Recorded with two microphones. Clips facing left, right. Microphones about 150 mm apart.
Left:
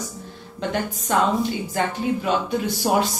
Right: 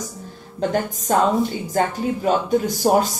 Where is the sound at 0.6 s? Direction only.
40° right (ahead or behind).